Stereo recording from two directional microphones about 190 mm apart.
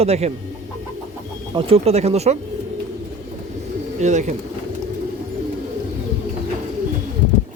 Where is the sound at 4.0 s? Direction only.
40° right (ahead or behind).